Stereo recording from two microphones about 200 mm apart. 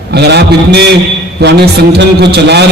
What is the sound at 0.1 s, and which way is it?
A man's voice, 55° right (ahead or behind).